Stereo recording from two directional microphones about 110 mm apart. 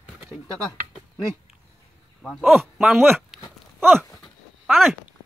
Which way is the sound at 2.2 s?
Centre (ahead or behind).